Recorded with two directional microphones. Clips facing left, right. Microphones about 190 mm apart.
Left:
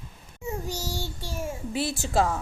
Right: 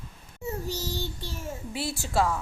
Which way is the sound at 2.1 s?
40° left (ahead or behind).